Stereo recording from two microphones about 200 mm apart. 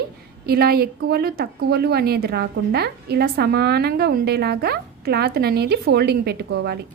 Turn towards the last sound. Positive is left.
turn(degrees=-55)  # may be behind; listen again after turning